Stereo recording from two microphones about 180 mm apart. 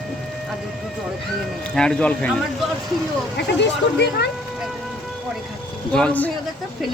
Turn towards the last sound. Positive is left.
turn(degrees=10)  # may be behind; listen again after turning